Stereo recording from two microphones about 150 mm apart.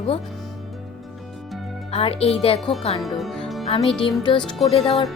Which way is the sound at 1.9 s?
40° left (ahead or behind).